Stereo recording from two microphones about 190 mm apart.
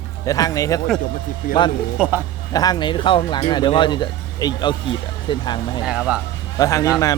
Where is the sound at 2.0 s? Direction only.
10° right (ahead or behind).